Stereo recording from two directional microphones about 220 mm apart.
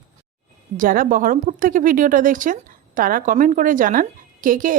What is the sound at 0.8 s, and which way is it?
Speech, 40° right (ahead or behind).